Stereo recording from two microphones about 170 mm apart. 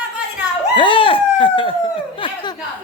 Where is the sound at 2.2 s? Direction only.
25° left (ahead or behind).